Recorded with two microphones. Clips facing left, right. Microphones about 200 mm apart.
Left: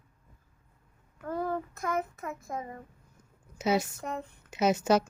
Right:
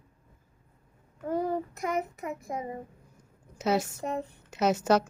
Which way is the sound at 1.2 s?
20° right (ahead or behind).